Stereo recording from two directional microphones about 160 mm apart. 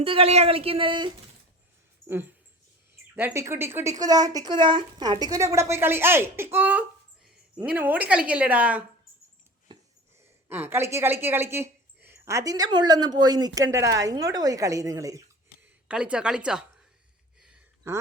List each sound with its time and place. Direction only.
0.0 s speech: 35° right (ahead or behind)
3.2 s a woman's voice: 15° right (ahead or behind)
9.7 s a sound: 30° right (ahead or behind)
10.5 s a woman's voice: 15° right (ahead or behind)
15.6 s speech: 5° right (ahead or behind)